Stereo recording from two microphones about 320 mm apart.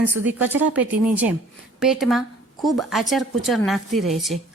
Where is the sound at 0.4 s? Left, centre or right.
Centre.